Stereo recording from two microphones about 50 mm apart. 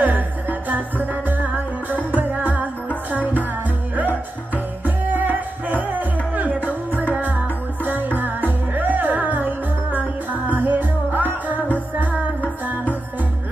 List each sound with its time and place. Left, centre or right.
0.0 s music: right
4.8 s music: right
7.8 s music: right